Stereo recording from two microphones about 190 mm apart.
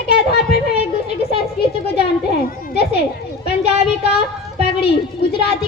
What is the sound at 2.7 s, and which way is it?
Speech, 60° left (ahead or behind).